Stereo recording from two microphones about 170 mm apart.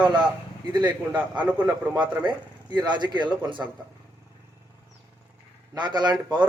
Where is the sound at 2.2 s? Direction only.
25° right (ahead or behind).